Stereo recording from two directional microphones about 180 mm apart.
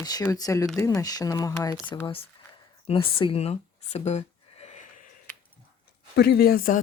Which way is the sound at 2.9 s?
30° left (ahead or behind).